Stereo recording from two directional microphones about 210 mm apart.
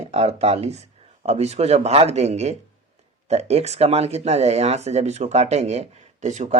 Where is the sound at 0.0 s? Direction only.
30° right (ahead or behind).